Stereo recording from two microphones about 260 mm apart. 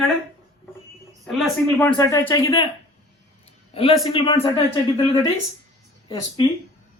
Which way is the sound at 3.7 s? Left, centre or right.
Left.